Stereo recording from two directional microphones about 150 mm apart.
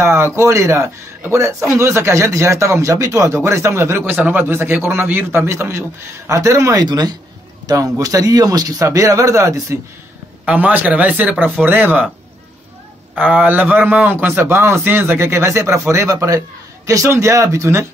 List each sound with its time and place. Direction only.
0.0 s a man's voice: 20° right (ahead or behind)
13.1 s a man's voice: 10° right (ahead or behind)